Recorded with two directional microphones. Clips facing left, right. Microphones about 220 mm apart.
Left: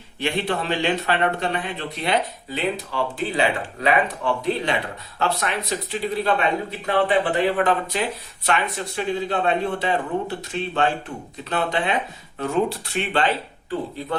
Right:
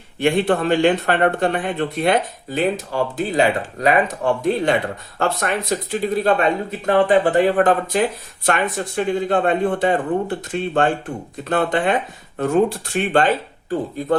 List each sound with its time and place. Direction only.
0.2 s speech: 50° right (ahead or behind)